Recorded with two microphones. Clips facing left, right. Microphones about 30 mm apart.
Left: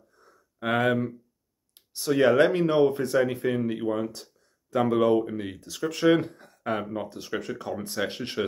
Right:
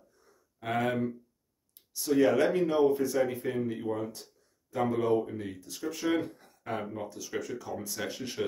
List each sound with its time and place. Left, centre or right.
0.6 s speech: left
2.0 s speech: left
4.0 s speech: left
5.3 s speech: left
5.7 s speech: left
6.0 s speech: left
7.7 s speech: left